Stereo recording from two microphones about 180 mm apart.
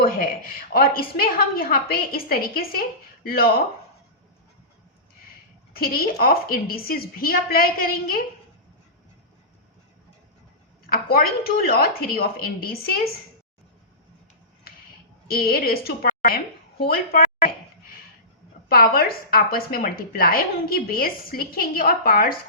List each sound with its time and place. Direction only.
0.0 s speech: 55° left (ahead or behind)
5.7 s speech: 55° left (ahead or behind)
10.8 s speech: 55° left (ahead or behind)
15.3 s a sound: 55° left (ahead or behind)
18.7 s speech: 55° left (ahead or behind)